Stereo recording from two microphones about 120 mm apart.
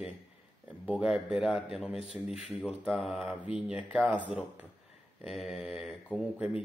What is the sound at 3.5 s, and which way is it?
A man's voice, 10° right (ahead or behind).